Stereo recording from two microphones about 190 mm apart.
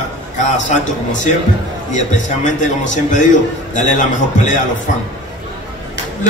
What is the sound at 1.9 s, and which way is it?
A man's voice, 40° left (ahead or behind).